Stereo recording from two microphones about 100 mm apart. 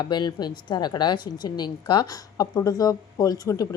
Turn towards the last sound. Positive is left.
turn(degrees=35)  # may be behind; listen again after turning